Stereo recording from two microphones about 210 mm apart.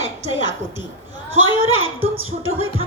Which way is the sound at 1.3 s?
70° right (ahead or behind).